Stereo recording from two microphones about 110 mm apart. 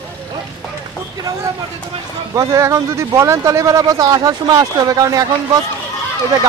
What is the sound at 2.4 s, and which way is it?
Speech, 25° right (ahead or behind).